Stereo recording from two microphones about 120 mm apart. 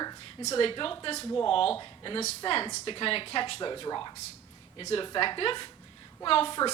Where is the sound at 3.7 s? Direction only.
35° left (ahead or behind).